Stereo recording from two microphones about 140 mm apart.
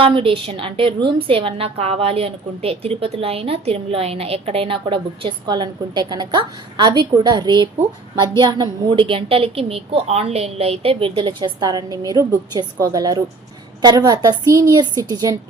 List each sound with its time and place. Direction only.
0.0 s a woman's voice: 40° right (ahead or behind)